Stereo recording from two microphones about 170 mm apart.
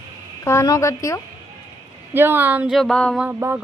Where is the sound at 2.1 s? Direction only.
10° right (ahead or behind); by 3.2 s 5° left (ahead or behind).